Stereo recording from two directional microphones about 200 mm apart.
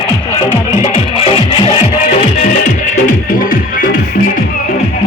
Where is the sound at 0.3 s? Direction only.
30° left (ahead or behind).